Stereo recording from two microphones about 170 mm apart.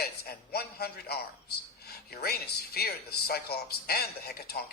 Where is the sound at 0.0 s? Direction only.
65° left (ahead or behind).